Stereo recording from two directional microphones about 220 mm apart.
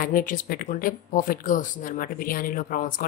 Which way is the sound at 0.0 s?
40° left (ahead or behind).